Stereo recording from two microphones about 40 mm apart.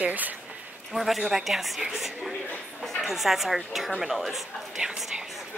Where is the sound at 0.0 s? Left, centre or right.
Right.